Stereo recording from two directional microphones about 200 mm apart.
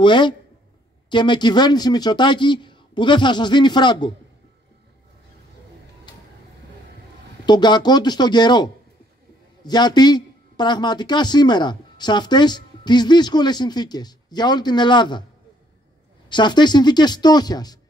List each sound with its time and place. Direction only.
0.0 s a man's voice: 25° left (ahead or behind)
6.1 s vehicle: 20° left (ahead or behind)
7.4 s a man's voice: 20° left (ahead or behind)
16.3 s a man's voice: 20° left (ahead or behind)